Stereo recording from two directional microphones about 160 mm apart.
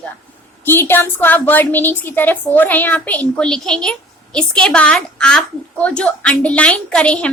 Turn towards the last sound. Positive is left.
turn(degrees=5)  # may be behind; listen again after turning